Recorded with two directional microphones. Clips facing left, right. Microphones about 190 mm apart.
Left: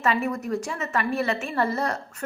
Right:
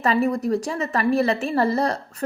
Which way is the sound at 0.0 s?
35° right (ahead or behind).